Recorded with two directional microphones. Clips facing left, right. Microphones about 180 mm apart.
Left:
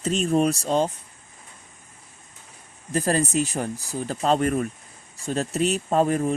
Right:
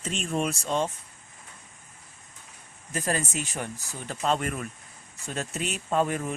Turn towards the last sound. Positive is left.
turn(degrees=35)  # may be behind; listen again after turning